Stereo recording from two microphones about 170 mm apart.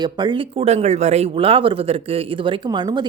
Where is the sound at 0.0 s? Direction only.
25° right (ahead or behind).